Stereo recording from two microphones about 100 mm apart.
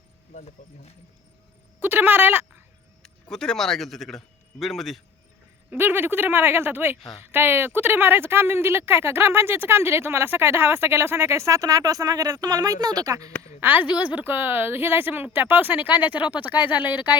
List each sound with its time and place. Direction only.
1.8 s speech: 20° right (ahead or behind)
3.0 s speech: 5° left (ahead or behind)
5.7 s speech: 20° right (ahead or behind)
13.6 s speech: 20° right (ahead or behind)